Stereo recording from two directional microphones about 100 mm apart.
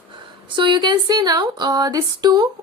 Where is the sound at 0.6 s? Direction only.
50° right (ahead or behind).